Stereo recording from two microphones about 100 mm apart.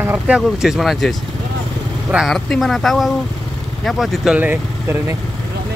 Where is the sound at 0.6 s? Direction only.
5° right (ahead or behind).